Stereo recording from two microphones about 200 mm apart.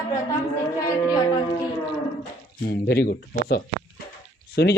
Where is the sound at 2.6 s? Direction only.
50° left (ahead or behind).